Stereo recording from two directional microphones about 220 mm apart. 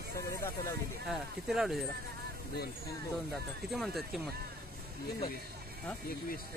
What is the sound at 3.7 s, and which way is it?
Speech, centre (ahead or behind).